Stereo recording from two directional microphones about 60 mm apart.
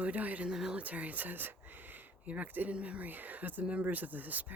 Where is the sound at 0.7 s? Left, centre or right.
Right.